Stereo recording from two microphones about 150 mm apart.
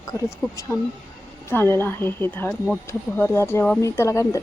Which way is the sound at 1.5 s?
15° left (ahead or behind).